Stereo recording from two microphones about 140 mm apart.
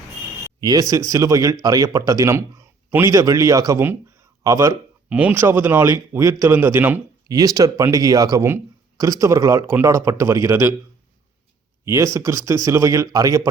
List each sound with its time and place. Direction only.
0.6 s a man's voice: 25° right (ahead or behind)
5.0 s speech: 10° right (ahead or behind)
7.3 s speech: 25° right (ahead or behind)
11.9 s speech: 20° right (ahead or behind)